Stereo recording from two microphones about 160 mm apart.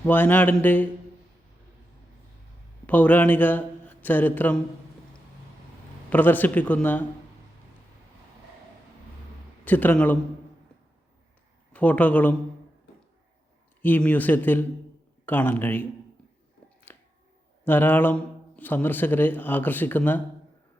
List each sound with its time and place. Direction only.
0.0 s speech: 10° left (ahead or behind)
2.8 s a man's voice: 10° left (ahead or behind)
6.1 s speech: 10° left (ahead or behind)
9.6 s speech: 10° left (ahead or behind)
11.7 s speech: 10° left (ahead or behind)
13.8 s speech: 10° left (ahead or behind)
16.6 s finger snapping: 15° left (ahead or behind)
17.7 s speech: 10° left (ahead or behind)